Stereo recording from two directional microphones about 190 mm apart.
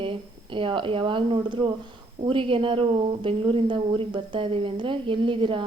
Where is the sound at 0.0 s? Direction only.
25° right (ahead or behind).